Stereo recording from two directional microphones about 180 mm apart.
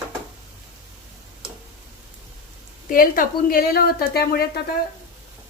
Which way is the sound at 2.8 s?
50° left (ahead or behind).